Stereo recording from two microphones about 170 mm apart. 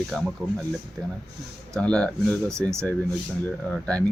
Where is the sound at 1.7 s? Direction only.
5° left (ahead or behind).